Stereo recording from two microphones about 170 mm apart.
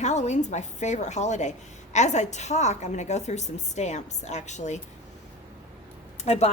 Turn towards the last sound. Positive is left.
turn(degrees=40)  # may be behind; listen again after turning